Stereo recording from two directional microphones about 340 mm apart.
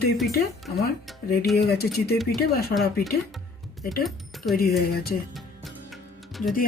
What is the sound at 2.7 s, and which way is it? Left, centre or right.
Speech, centre.